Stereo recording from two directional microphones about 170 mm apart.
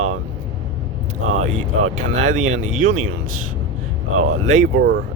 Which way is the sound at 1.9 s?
45° right (ahead or behind).